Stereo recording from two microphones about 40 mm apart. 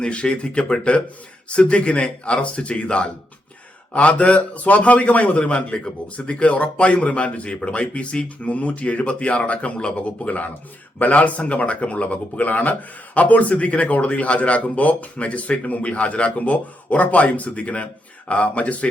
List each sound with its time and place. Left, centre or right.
0.0 s a man's voice: left